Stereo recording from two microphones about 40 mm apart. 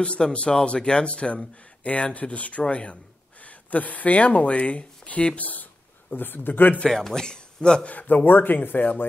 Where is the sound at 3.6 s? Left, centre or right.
Left.